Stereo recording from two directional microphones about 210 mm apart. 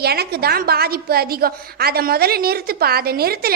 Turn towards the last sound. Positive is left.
turn(degrees=-45)  # may be behind; listen again after turning